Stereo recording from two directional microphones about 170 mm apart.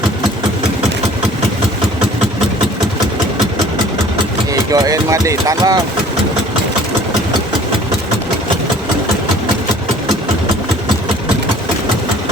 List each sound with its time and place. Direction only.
4.7 s speech: 20° right (ahead or behind)